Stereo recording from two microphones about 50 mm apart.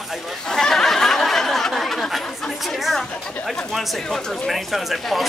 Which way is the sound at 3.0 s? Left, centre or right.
Centre.